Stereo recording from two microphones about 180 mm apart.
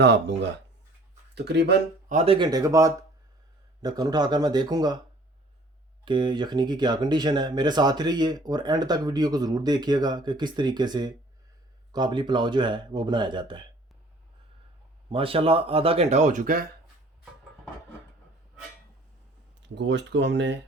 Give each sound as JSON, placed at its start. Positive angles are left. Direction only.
{"t": 0.0, "sound": "speech", "side_deg": -80}
{"t": 1.4, "sound": "speech", "side_deg": -65}
{"t": 2.0, "sound": "speech", "side_deg": -35}
{"t": 6.1, "sound": "speech", "side_deg": -25}
{"t": 15.1, "sound": "speech", "side_deg": -30}
{"t": 19.6, "sound": "speech", "side_deg": -80}